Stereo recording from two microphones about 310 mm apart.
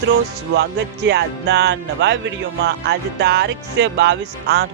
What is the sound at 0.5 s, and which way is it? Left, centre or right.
Music, right.